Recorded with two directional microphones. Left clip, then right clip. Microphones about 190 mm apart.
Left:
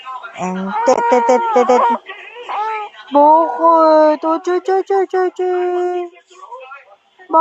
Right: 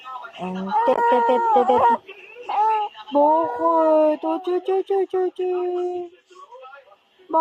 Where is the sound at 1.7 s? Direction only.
20° right (ahead or behind).